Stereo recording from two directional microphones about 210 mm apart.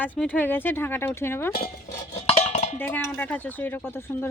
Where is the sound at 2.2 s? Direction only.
30° left (ahead or behind).